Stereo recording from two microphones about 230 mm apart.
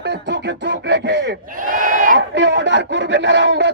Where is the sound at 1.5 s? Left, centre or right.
Right.